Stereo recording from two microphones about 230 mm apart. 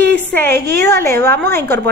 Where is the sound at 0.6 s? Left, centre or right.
Centre.